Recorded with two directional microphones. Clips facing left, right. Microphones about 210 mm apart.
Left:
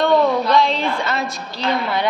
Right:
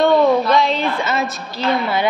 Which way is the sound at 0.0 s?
Centre (ahead or behind).